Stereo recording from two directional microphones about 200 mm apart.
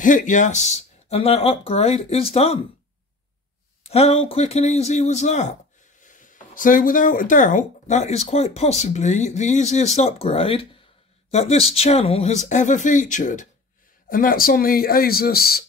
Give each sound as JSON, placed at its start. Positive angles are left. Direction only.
{"t": 0.0, "sound": "speech", "side_deg": 40}
{"t": 3.8, "sound": "a man's voice", "side_deg": 30}